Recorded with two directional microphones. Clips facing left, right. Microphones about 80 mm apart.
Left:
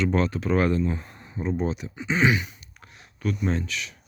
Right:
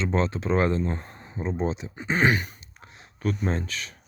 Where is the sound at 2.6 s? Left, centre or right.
Right.